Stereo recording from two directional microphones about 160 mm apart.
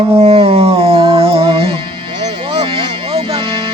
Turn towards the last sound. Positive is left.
turn(degrees=-35)  # may be behind; listen again after turning